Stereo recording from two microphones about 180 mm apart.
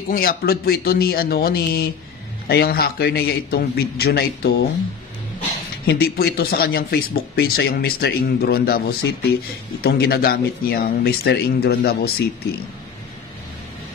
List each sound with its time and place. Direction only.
0.1 s speech: 55° left (ahead or behind)
5.9 s speech: 60° left (ahead or behind)